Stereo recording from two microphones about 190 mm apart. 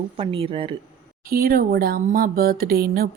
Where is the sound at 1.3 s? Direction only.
50° right (ahead or behind).